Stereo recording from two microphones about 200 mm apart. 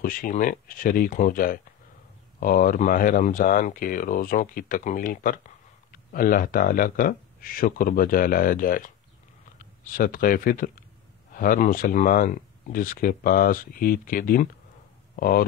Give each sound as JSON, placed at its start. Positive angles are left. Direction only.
{"t": 0.0, "sound": "speech", "side_deg": 45}